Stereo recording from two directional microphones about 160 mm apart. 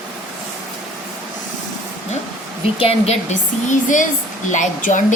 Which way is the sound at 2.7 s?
40° left (ahead or behind).